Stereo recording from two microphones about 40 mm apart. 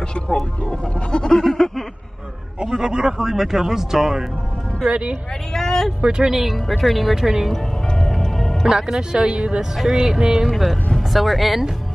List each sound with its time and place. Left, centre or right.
0.7 s goat: left
1.3 s a sound: centre
2.6 s speech: centre
4.8 s speech: right
5.5 s speech: centre
6.0 s speech: right
6.3 s speech: centre
7.5 s music: centre
8.6 s speech: centre
9.8 s speech: centre
10.5 s speech: centre